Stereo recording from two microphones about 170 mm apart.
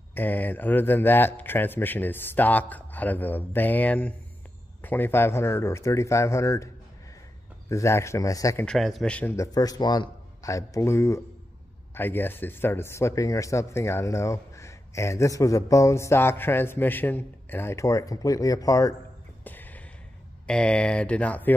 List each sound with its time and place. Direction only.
0.1 s speech: 10° left (ahead or behind)
7.7 s speech: 15° left (ahead or behind)
8.6 s speech: centre (ahead or behind); by 18.9 s 20° left (ahead or behind)
19.4 s a sound: 10° left (ahead or behind)
20.4 s speech: 5° left (ahead or behind)